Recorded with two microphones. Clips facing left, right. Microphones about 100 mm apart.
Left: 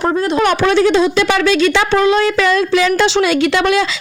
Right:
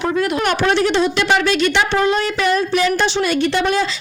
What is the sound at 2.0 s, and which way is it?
A woman's voice, 90° left.